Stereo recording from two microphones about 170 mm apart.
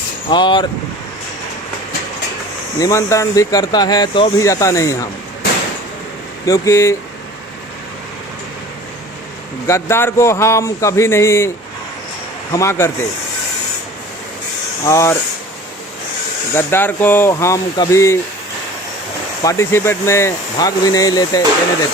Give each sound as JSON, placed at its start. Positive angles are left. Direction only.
{"t": 0.3, "sound": "speech", "side_deg": 25}
{"t": 2.7, "sound": "speech", "side_deg": 20}
{"t": 6.4, "sound": "speech", "side_deg": 20}
{"t": 9.6, "sound": "speech", "side_deg": 15}
{"t": 14.8, "sound": "speech", "side_deg": 15}
{"t": 16.6, "sound": "speech", "side_deg": 10}
{"t": 19.4, "sound": "speech", "side_deg": 20}